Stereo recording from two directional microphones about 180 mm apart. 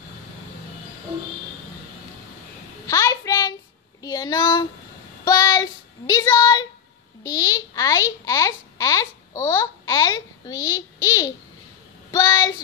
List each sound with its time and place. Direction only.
2.9 s a sound: 20° left (ahead or behind)
4.0 s speech: 20° left (ahead or behind)
5.2 s child singing: 20° left (ahead or behind)
7.2 s a child's voice: 20° left (ahead or behind)
12.1 s child singing: 20° left (ahead or behind)